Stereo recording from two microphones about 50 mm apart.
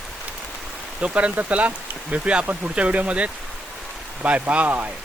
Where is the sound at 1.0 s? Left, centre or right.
Right.